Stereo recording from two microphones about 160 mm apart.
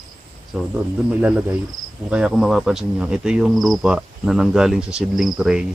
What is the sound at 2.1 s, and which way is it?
Speech, 5° right (ahead or behind).